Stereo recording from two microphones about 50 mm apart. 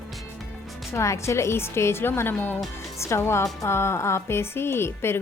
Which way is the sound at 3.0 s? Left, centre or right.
Left.